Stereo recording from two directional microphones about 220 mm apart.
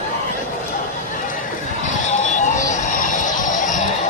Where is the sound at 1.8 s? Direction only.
35° left (ahead or behind).